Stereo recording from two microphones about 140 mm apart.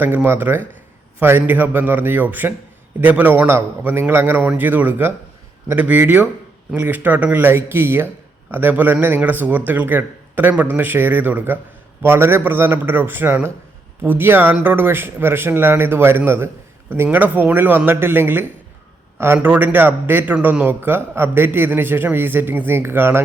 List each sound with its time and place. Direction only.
0.0 s speech: 15° right (ahead or behind)